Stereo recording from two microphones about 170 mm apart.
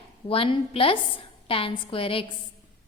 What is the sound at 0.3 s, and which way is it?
A woman's voice, 30° left (ahead or behind).